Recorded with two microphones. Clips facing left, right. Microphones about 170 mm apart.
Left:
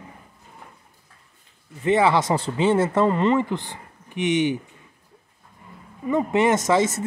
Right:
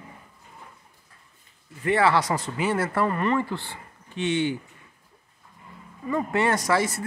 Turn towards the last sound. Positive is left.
turn(degrees=20)  # may be behind; listen again after turning